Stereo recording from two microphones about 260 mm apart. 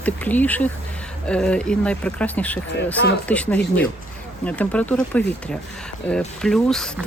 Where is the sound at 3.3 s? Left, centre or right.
Centre.